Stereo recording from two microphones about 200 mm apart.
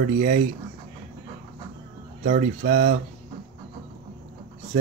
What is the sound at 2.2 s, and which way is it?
Speech, 40° right (ahead or behind).